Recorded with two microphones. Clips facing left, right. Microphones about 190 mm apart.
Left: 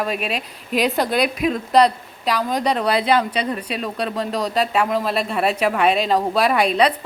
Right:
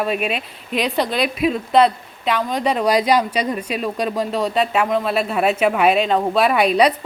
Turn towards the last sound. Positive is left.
turn(degrees=-5)  # may be behind; listen again after turning